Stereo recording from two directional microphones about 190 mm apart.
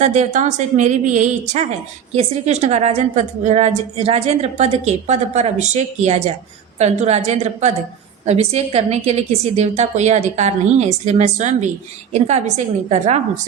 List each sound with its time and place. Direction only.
0.0 s a woman's voice: 35° right (ahead or behind)